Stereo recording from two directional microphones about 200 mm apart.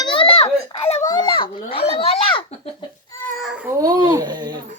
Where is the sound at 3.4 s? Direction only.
5° right (ahead or behind).